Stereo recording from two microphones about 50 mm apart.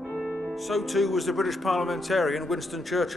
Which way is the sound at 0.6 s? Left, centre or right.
Centre.